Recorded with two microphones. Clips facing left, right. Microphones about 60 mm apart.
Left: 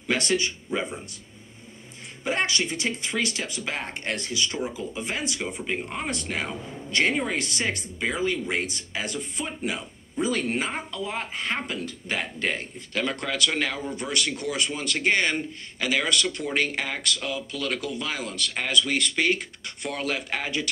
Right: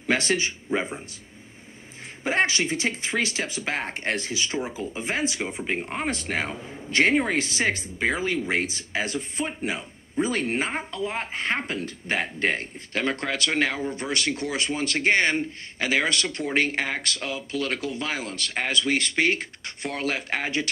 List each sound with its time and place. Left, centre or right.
0.1 s speech: right
2.2 s speech: right